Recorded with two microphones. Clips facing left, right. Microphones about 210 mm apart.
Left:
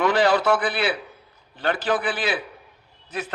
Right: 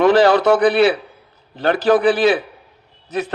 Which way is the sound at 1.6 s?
40° right (ahead or behind).